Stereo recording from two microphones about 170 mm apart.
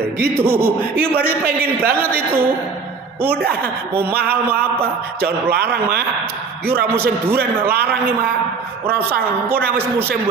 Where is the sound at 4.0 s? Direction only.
10° right (ahead or behind).